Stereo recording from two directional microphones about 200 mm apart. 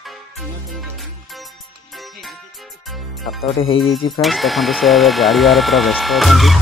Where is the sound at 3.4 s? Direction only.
30° left (ahead or behind).